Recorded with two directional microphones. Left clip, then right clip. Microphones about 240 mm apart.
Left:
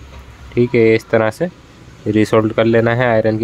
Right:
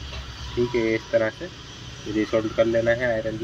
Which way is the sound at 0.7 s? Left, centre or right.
Left.